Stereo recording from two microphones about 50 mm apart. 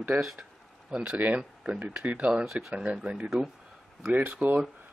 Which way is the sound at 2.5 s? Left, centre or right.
Centre.